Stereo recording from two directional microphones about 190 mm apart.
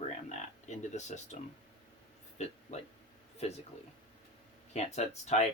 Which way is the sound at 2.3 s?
35° left (ahead or behind).